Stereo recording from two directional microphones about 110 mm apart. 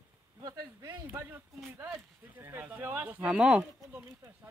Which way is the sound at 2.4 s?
20° right (ahead or behind).